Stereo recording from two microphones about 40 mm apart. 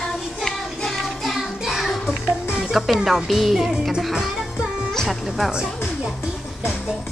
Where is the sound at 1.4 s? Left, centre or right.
Centre.